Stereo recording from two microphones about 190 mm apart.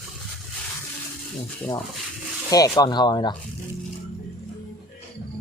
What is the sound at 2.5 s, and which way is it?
Speech, 20° left (ahead or behind).